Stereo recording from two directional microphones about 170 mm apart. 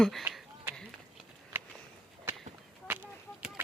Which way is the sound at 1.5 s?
15° right (ahead or behind).